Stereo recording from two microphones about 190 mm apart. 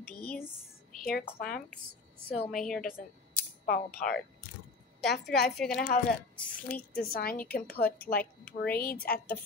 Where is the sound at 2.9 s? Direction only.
50° left (ahead or behind).